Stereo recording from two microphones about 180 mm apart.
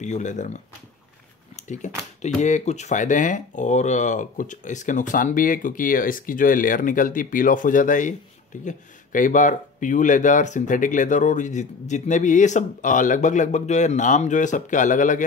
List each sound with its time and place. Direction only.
0.0 s speech: 40° left (ahead or behind)
1.6 s a sound: 40° left (ahead or behind)
2.2 s speech: 40° left (ahead or behind)